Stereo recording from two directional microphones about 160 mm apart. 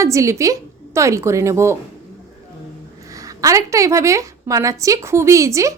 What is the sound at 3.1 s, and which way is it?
A woman's voice, 20° right (ahead or behind).